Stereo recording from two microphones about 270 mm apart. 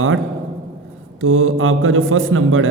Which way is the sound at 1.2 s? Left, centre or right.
Right.